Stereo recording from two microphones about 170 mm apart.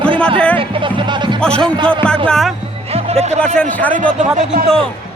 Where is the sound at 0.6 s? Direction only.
30° right (ahead or behind).